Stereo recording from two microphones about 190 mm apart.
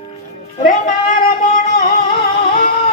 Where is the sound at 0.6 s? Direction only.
45° left (ahead or behind).